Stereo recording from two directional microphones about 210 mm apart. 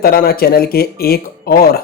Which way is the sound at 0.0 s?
45° left (ahead or behind).